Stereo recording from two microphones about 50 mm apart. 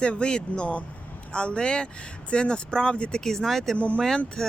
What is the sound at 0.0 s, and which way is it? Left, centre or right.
Speech, left.